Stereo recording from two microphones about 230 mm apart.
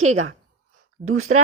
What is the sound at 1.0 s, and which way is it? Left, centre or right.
Speech, right.